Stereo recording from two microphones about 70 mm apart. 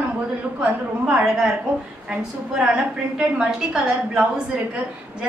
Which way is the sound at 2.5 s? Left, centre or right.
Centre.